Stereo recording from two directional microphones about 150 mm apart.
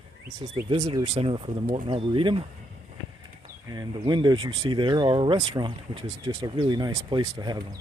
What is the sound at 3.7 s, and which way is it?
Speech, 25° right (ahead or behind).